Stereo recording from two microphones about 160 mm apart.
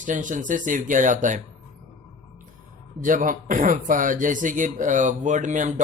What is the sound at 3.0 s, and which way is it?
Speech, 55° right (ahead or behind).